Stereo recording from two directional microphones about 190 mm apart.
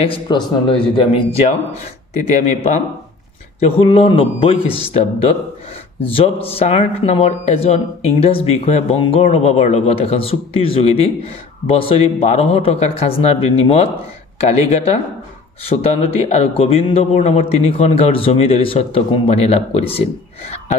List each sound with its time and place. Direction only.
0.0 s speech: 25° left (ahead or behind)
2.3 s a man's voice: 40° left (ahead or behind)
3.8 s a man's voice: 30° left (ahead or behind)